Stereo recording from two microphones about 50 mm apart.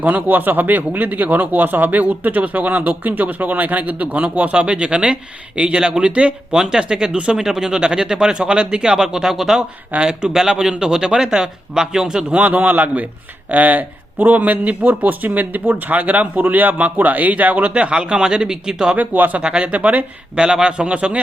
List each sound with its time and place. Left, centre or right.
0.0 s speech: right; by 12.2 s centre
12.3 s speech: right
17.7 s speech: right
18.9 s speech: right
19.4 s speech: centre
20.3 s speech: centre